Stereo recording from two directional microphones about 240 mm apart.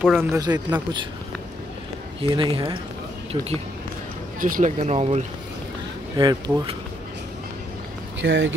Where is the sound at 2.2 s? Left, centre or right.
Right.